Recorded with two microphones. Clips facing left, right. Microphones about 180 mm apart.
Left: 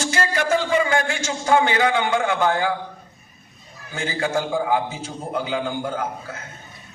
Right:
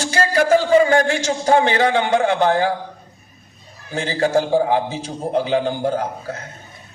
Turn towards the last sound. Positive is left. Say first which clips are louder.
# right 4 dB
turn(degrees=-35)  # may be behind; listen again after turning